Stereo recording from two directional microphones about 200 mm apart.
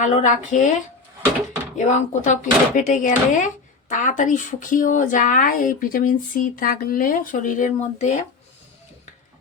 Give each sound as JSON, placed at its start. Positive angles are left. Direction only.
{"t": 0.0, "sound": "speech", "side_deg": 35}
{"t": 1.7, "sound": "speech", "side_deg": 35}